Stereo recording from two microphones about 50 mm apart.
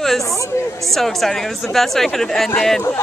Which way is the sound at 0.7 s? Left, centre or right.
Centre.